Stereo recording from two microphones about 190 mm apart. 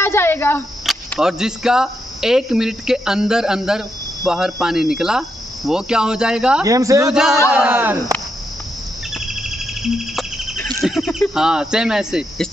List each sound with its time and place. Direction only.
0.0 s speech: 10° left (ahead or behind)
0.8 s speech: centre (ahead or behind)
6.6 s speech: 15° right (ahead or behind)
7.1 s speech: 5° right (ahead or behind)
9.1 s a sound: centre (ahead or behind)
10.6 s speech: centre (ahead or behind)